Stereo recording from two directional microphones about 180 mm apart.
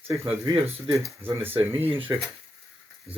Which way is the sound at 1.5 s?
35° right (ahead or behind).